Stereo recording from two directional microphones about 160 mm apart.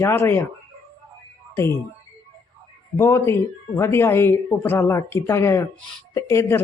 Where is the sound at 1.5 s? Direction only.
15° left (ahead or behind).